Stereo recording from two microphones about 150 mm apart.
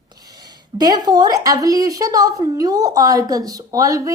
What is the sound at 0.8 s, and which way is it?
A woman's voice, 25° right (ahead or behind).